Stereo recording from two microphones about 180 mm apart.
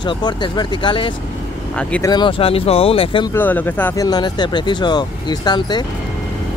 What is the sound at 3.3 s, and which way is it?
Speech, 10° left (ahead or behind).